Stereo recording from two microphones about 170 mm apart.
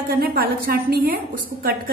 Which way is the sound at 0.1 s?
60° right (ahead or behind).